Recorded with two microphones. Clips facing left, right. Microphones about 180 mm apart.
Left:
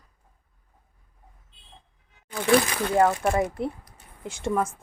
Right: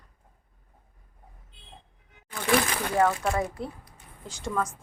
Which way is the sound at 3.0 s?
20° left (ahead or behind).